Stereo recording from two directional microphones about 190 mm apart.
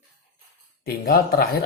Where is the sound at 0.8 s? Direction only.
55° left (ahead or behind).